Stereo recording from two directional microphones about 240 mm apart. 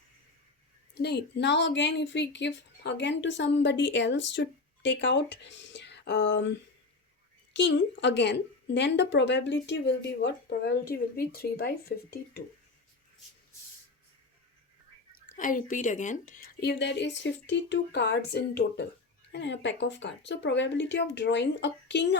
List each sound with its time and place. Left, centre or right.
0.9 s a woman's voice: left
15.4 s a woman's voice: left